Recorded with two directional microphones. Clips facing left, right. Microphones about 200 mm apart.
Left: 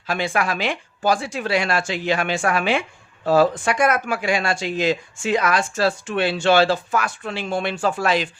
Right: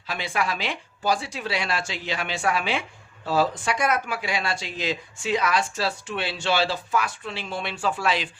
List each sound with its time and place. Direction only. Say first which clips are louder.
0.1 s speech: left 5 dB; 50° left (ahead or behind)